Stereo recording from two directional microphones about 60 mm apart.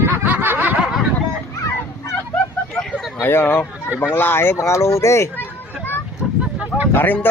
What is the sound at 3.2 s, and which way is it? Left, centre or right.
Speech, left.